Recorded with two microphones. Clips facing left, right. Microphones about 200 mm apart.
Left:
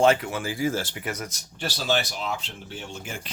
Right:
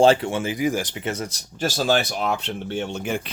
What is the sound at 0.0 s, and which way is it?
Speech, 30° right (ahead or behind).